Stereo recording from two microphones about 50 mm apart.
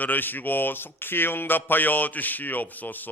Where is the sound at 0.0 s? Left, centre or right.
Left.